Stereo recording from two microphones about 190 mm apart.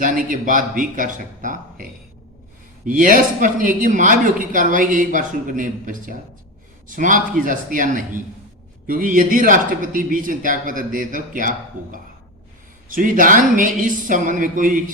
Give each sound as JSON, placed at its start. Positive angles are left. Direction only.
{"t": 0.0, "sound": "speech", "side_deg": -45}